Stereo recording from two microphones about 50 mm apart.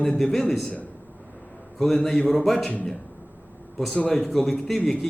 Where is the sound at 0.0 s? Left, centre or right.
Centre.